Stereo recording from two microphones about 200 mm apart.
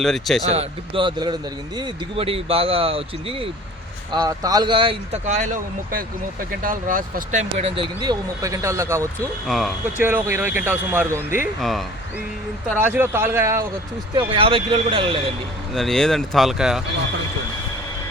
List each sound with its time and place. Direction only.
0.0 s speech: centre (ahead or behind)
0.4 s speech: 30° right (ahead or behind)
4.1 s speech: 20° right (ahead or behind)
9.5 s speech: centre (ahead or behind)
10.0 s speech: 10° right (ahead or behind)
12.7 s speech: 10° right (ahead or behind)
14.2 s speech: 25° right (ahead or behind)
15.7 s speech: centre (ahead or behind)